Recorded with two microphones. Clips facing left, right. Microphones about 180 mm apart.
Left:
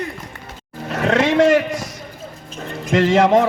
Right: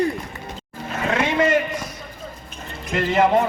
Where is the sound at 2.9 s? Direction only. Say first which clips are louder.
Left 4 dB; 90° left.